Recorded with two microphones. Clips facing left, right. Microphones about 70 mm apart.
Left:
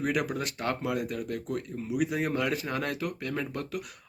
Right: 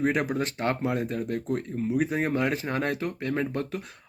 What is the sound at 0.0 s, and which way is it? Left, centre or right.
Speech, right.